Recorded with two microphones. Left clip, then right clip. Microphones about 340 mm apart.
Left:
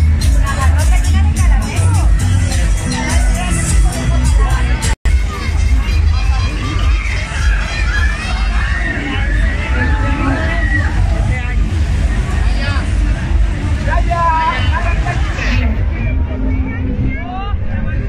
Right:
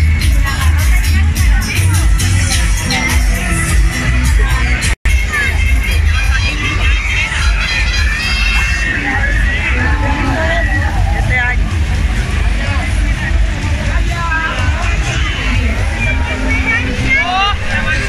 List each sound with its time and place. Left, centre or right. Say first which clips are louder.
16.4 s vehicle: right 11 dB; right